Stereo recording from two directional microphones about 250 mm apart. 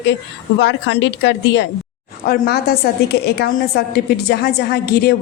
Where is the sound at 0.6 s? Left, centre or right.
Left.